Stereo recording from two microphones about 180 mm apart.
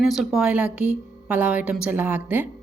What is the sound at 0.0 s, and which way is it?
A woman's voice, centre (ahead or behind).